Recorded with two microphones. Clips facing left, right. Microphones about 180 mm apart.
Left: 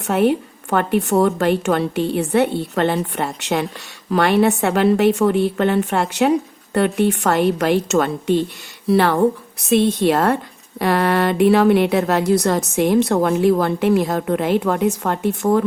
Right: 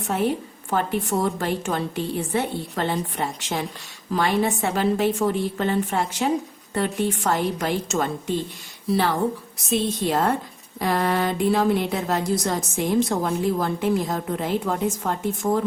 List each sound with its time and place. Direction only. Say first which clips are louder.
0.0 s a woman's voice: left 7 dB; 70° left (ahead or behind)